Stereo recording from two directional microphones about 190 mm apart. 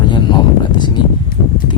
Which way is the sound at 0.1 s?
25° left (ahead or behind).